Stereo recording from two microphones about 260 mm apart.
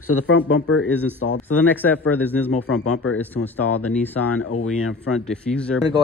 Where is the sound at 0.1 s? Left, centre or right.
Left.